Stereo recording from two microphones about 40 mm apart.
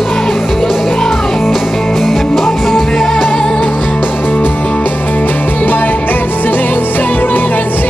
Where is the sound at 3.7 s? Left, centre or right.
Left.